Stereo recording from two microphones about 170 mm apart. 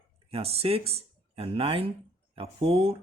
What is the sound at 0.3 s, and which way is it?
Speech, 35° right (ahead or behind).